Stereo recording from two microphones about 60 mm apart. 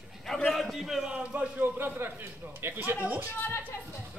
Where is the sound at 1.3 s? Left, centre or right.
Right.